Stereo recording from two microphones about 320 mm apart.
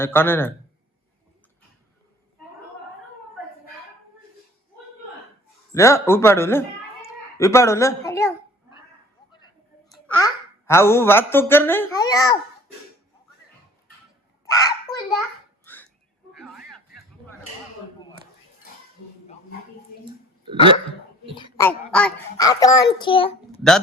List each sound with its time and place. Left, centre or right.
0.0 s speech: centre
5.7 s a man's voice: centre
10.2 s speech: centre
14.4 s a sound: centre
20.1 s a sound: centre
21.3 s speech: centre